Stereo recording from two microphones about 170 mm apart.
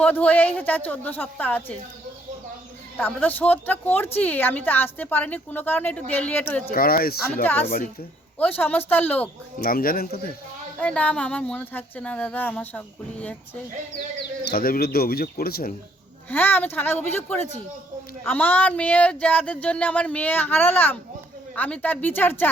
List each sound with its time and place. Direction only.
0.0 s a woman's voice: 10° left (ahead or behind)
3.0 s a woman's voice: 10° left (ahead or behind)
6.7 s speech: 60° left (ahead or behind)
7.4 s a woman's voice: 10° left (ahead or behind)
9.6 s speech: 60° left (ahead or behind)
10.8 s a woman's voice: 10° left (ahead or behind)
14.4 s speech: 60° left (ahead or behind)
16.3 s a woman's voice: 10° left (ahead or behind)